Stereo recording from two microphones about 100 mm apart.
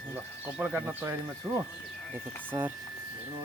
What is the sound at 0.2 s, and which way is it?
Speech, 20° right (ahead or behind).